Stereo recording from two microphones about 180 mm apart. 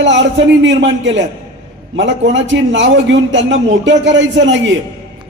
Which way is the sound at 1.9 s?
90° right.